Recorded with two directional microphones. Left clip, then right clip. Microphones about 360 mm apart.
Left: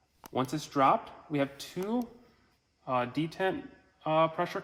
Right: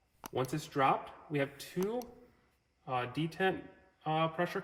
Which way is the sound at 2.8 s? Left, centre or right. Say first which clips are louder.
Left 5 dB; centre.